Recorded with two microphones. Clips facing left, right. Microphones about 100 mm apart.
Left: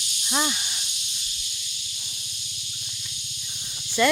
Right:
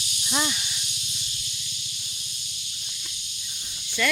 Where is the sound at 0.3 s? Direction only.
15° left (ahead or behind).